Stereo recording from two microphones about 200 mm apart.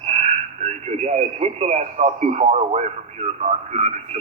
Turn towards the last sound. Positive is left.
turn(degrees=-35)  # may be behind; listen again after turning